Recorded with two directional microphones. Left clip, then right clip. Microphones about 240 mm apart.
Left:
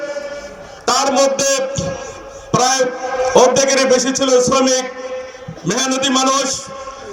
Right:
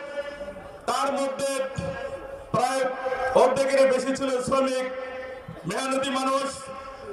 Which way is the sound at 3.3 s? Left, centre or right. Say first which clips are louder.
Left 8 dB; left.